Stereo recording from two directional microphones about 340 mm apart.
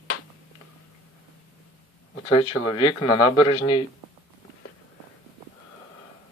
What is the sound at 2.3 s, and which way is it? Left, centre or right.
Speech, centre.